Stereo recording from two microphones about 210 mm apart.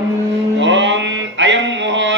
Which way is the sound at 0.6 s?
60° right (ahead or behind).